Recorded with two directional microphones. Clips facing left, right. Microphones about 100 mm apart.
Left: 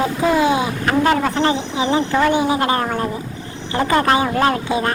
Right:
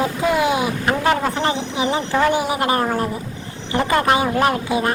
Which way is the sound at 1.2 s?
25° right (ahead or behind).